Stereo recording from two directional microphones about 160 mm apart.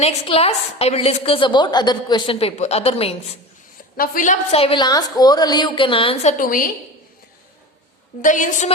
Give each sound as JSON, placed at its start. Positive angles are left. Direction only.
{"t": 0.0, "sound": "a woman's voice", "side_deg": 40}
{"t": 3.9, "sound": "a woman's voice", "side_deg": 60}
{"t": 4.5, "sound": "a woman's voice", "side_deg": 35}
{"t": 6.3, "sound": "a woman's voice", "side_deg": 60}
{"t": 8.2, "sound": "a woman's voice", "side_deg": 50}